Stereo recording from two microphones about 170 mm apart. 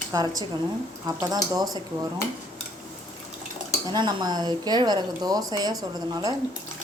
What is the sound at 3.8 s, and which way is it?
Speech, 25° right (ahead or behind).